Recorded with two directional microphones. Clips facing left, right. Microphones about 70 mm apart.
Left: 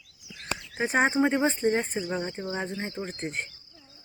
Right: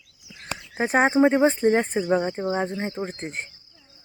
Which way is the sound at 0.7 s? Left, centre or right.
Right.